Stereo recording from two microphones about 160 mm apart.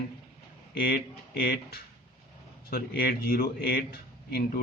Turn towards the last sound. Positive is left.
turn(degrees=75)  # may be behind; listen again after turning